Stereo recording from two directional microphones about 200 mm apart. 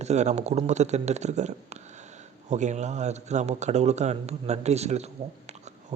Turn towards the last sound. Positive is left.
turn(degrees=-35)  # may be behind; listen again after turning